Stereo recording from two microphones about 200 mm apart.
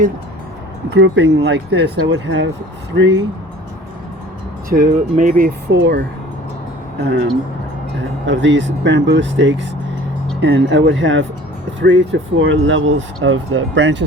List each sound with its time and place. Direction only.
0.9 s speech: 65° right (ahead or behind)
4.7 s speech: 40° right (ahead or behind)
5.6 s speech: 55° right (ahead or behind)
8.3 s speech: 65° right (ahead or behind)